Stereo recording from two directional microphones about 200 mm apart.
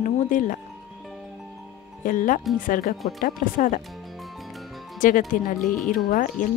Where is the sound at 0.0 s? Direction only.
40° left (ahead or behind).